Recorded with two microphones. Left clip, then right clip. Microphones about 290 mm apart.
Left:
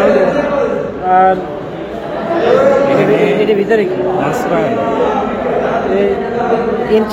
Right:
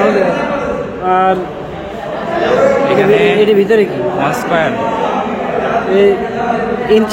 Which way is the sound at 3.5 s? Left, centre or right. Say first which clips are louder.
Right 2 dB; right.